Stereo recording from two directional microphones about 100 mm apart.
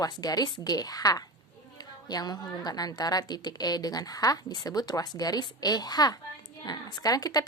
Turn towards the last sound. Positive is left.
turn(degrees=40)  # may be behind; listen again after turning